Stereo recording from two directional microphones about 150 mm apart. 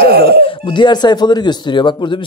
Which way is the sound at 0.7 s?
30° left (ahead or behind).